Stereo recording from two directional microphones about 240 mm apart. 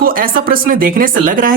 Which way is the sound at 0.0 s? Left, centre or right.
Right.